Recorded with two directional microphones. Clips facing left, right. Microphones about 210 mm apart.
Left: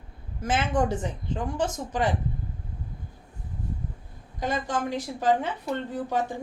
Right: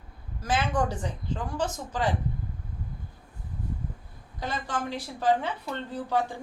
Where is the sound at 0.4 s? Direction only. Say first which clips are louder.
Left 2 dB; 25° left (ahead or behind).